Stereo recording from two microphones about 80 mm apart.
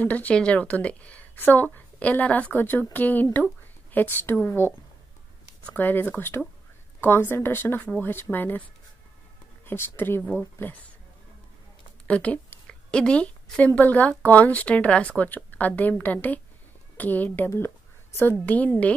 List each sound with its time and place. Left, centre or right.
0.0 s a woman's voice: centre
5.7 s a woman's voice: left
9.7 s a woman's voice: left
12.1 s speech: centre
12.6 s a sound: centre
13.7 s a woman's voice: left
17.5 s a sound: left
18.4 s a woman's voice: centre